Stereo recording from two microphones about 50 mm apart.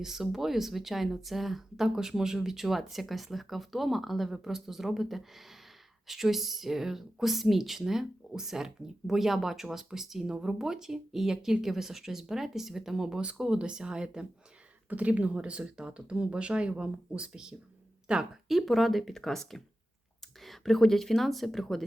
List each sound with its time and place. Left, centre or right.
0.0 s speech: centre
14.8 s speech: right
18.4 s speech: centre